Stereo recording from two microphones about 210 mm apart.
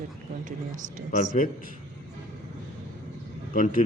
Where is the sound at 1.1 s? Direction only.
35° left (ahead or behind).